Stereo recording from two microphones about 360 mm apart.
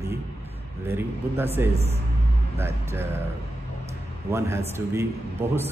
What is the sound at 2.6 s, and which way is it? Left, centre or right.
Speech, centre.